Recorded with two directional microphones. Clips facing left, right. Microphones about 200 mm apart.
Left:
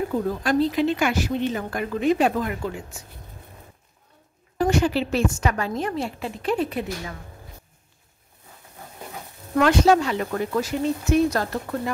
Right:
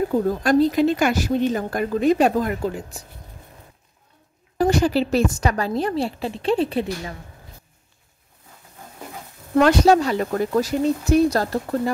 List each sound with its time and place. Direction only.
0.1 s a woman's voice: 40° right (ahead or behind)
4.6 s a woman's voice: 35° right (ahead or behind)
9.6 s a woman's voice: 35° right (ahead or behind)